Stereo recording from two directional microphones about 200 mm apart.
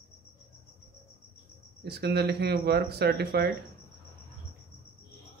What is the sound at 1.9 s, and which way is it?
Speech, 55° right (ahead or behind).